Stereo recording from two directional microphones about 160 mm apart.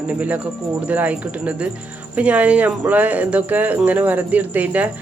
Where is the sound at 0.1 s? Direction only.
10° right (ahead or behind).